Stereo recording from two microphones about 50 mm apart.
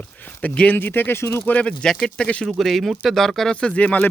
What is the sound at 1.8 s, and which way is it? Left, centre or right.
Speech, centre.